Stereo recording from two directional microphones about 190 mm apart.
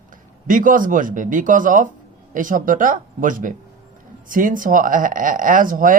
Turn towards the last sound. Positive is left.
turn(degrees=-45)  # may be behind; listen again after turning